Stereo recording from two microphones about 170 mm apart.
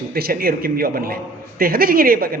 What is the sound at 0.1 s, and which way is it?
A man's voice, 65° right (ahead or behind).